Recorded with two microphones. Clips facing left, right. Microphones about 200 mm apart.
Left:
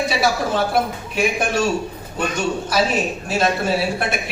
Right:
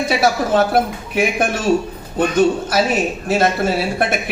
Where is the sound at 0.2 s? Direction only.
50° right (ahead or behind).